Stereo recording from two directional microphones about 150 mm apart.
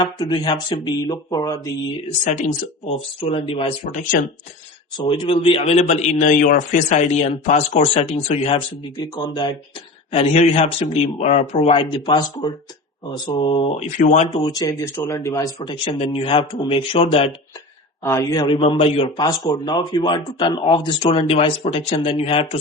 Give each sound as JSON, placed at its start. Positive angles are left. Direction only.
{"t": 0.0, "sound": "speech", "side_deg": 30}
{"t": 2.0, "sound": "a man's voice", "side_deg": 50}
{"t": 3.2, "sound": "speech", "side_deg": 35}
{"t": 3.9, "sound": "speech", "side_deg": 60}
{"t": 4.9, "sound": "a man's voice", "side_deg": 30}
{"t": 10.1, "sound": "a man's voice", "side_deg": 45}
{"t": 11.7, "sound": "a man's voice", "side_deg": 35}
{"t": 14.3, "sound": "speech", "side_deg": 25}
{"t": 15.5, "sound": "speech", "side_deg": 35}
{"t": 18.0, "sound": "speech", "side_deg": 20}
{"t": 18.4, "sound": "speech", "side_deg": 35}
{"t": 19.2, "sound": "speech", "side_deg": 30}